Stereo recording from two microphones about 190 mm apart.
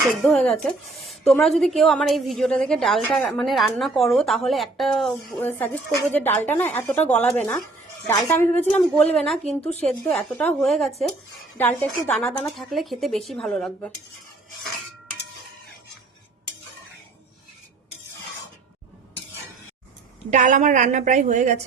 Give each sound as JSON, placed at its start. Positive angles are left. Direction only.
{"t": 0.0, "sound": "a woman's voice", "side_deg": 0}
{"t": 9.4, "sound": "a woman's voice", "side_deg": 35}
{"t": 10.2, "sound": "a woman's voice", "side_deg": 5}
{"t": 20.3, "sound": "a woman's voice", "side_deg": -40}